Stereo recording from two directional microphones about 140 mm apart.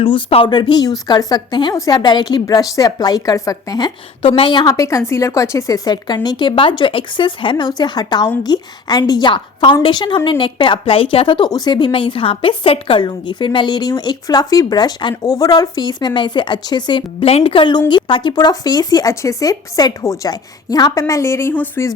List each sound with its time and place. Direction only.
0.0 s a woman's voice: 40° left (ahead or behind)
17.2 s speech: 45° left (ahead or behind); by 21.8 s 15° left (ahead or behind)